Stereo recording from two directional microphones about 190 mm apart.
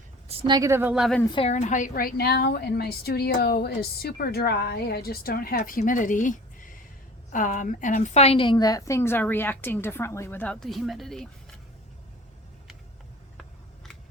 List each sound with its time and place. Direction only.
0.3 s a woman's voice: 25° right (ahead or behind); by 1.2 s centre (ahead or behind)
1.2 s a woman's voice: 25° left (ahead or behind)
1.5 s a woman's voice: 35° left (ahead or behind); by 11.3 s centre (ahead or behind)